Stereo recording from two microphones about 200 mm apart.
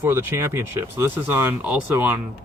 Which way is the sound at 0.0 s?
10° right (ahead or behind).